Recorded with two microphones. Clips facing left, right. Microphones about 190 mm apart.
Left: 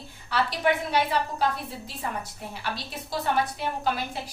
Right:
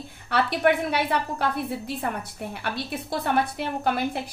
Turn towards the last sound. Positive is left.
turn(degrees=-55)  # may be behind; listen again after turning